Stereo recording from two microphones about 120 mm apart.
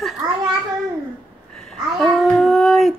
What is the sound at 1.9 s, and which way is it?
Child singing, 5° left (ahead or behind).